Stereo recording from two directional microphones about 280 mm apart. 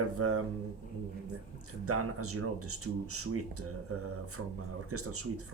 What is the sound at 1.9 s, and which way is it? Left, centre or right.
Speech, right.